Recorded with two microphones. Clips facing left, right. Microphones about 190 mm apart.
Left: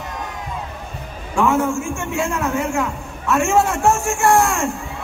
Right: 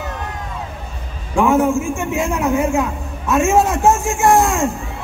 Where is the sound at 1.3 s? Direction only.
15° right (ahead or behind).